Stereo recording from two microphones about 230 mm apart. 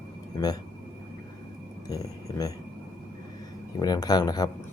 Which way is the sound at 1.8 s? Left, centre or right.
Centre.